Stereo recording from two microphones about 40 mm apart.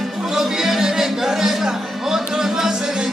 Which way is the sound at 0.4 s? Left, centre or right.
Centre.